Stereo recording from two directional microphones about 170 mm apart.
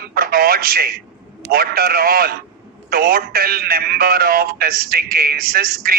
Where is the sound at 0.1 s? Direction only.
60° right (ahead or behind).